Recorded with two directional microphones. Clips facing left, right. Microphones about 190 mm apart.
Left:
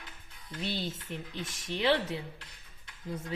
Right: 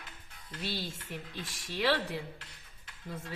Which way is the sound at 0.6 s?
20° left (ahead or behind).